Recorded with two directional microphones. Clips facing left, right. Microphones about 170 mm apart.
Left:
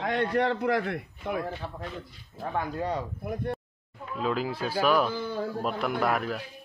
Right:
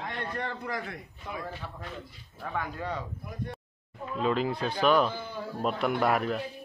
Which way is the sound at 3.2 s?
55° left (ahead or behind).